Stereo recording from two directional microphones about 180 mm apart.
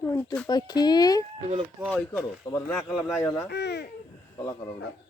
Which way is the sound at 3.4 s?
65° left (ahead or behind).